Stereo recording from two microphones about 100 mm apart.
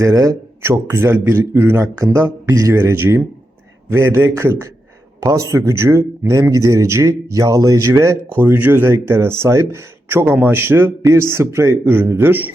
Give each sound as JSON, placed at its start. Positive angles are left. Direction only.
{"t": 0.0, "sound": "speech", "side_deg": -35}